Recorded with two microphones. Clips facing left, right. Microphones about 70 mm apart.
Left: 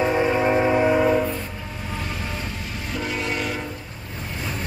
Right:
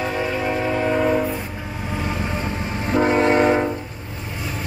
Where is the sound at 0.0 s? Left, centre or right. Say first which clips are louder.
Left 3 dB; left; by 1.2 s centre.